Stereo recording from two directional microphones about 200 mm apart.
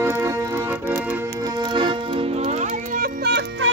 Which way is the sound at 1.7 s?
25° right (ahead or behind).